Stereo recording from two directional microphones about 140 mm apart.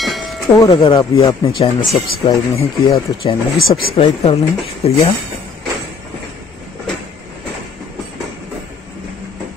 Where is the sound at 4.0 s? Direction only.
45° left (ahead or behind).